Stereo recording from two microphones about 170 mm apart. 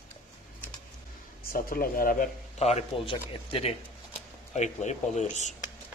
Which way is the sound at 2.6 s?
40° left (ahead or behind).